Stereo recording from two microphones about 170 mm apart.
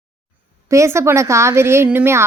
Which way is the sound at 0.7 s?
15° right (ahead or behind).